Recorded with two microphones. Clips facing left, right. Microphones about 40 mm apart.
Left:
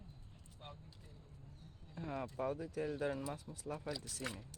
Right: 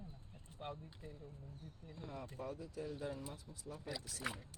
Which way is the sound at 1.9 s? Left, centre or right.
Left.